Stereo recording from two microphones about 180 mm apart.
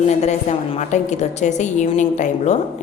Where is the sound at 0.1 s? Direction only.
40° left (ahead or behind).